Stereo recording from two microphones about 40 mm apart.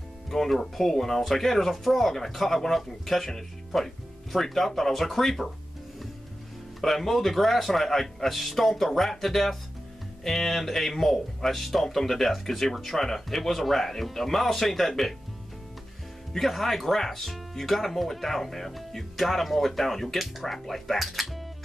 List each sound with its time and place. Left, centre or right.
0.3 s speech: centre
6.8 s speech: centre
16.3 s speech: centre